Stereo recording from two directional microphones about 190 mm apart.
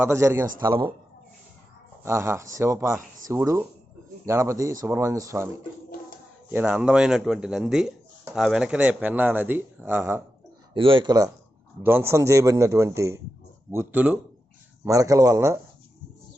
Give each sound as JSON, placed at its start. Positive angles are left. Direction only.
{"t": 0.0, "sound": "speech", "side_deg": -15}
{"t": 2.0, "sound": "speech", "side_deg": -15}
{"t": 6.5, "sound": "speech", "side_deg": -10}
{"t": 10.8, "sound": "speech", "side_deg": -25}